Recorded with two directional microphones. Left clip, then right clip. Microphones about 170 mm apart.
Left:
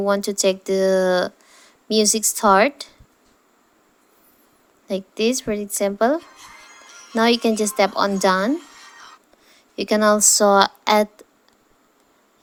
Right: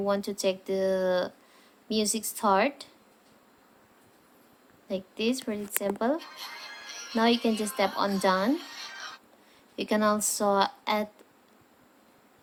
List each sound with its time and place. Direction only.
0.0 s speech: 40° left (ahead or behind)
4.9 s a woman's voice: 40° left (ahead or behind)
6.3 s music: 5° left (ahead or behind)
7.1 s a woman's voice: 40° left (ahead or behind)
8.5 s a sound: 5° left (ahead or behind)
9.5 s a woman's voice: 35° left (ahead or behind)